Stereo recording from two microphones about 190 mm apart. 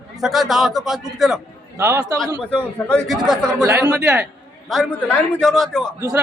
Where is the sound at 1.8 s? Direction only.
20° right (ahead or behind).